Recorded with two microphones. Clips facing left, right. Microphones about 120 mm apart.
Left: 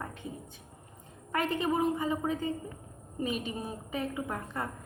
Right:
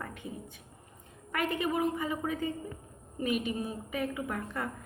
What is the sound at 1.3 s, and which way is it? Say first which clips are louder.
A woman's voice: left 2 dB; 30° left (ahead or behind).